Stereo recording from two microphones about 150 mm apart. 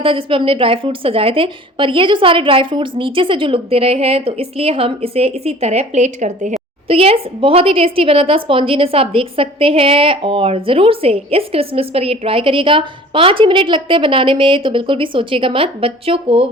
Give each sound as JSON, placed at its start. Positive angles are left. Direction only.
{"t": 0.0, "sound": "a woman's voice", "side_deg": -35}
{"t": 6.8, "sound": "a woman's voice", "side_deg": -40}